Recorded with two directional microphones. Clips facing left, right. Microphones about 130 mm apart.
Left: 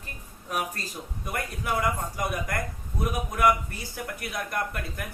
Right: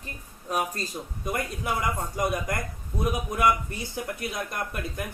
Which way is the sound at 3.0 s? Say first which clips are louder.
Even; 20° right (ahead or behind).